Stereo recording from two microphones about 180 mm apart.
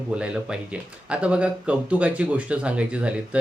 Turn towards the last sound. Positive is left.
turn(degrees=-5)  # may be behind; listen again after turning